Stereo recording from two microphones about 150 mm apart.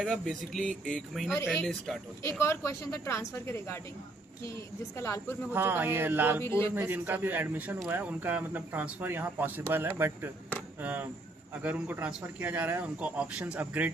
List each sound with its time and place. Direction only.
0.0 s a man's voice: centre (ahead or behind)
2.4 s speech: 20° left (ahead or behind)
4.9 s speech: 20° left (ahead or behind)
5.5 s speech: 15° right (ahead or behind)
6.4 s speech: 15° left (ahead or behind)
6.7 s speech: 10° right (ahead or behind)